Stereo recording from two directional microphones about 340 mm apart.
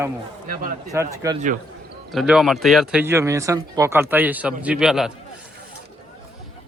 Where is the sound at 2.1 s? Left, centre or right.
Centre.